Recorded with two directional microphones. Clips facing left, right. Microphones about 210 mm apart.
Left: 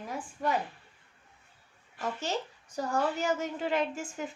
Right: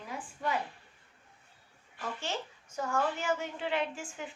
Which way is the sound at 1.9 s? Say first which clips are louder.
Left 4 dB; 40° left (ahead or behind).